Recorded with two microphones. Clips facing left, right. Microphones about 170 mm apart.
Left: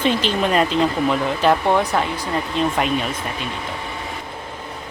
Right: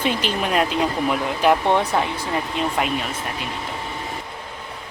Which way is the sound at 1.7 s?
25° right (ahead or behind).